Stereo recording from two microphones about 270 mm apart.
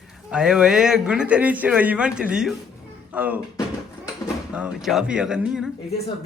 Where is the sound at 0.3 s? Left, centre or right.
Centre.